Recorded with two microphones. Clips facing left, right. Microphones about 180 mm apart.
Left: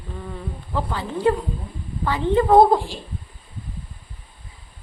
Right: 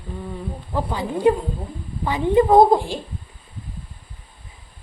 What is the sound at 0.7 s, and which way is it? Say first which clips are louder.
A woman's voice: right 2 dB; 15° right (ahead or behind).